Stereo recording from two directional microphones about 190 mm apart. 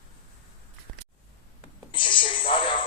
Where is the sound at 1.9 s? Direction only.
25° left (ahead or behind).